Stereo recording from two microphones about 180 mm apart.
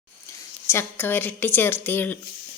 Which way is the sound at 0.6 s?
15° left (ahead or behind).